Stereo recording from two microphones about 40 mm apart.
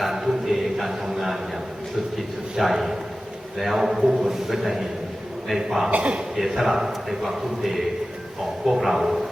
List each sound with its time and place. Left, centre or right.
0.0 s a sound: centre
2.6 s a man's voice: centre
5.9 s a man's voice: right
6.3 s a man's voice: centre